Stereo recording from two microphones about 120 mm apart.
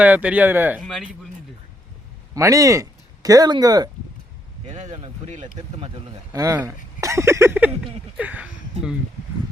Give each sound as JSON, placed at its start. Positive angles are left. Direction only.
{"t": 0.0, "sound": "speech", "side_deg": -10}
{"t": 0.8, "sound": "speech", "side_deg": 0}
{"t": 2.3, "sound": "speech", "side_deg": -25}
{"t": 4.7, "sound": "speech", "side_deg": -70}
{"t": 5.5, "sound": "speech", "side_deg": -50}
{"t": 6.3, "sound": "speech", "side_deg": -25}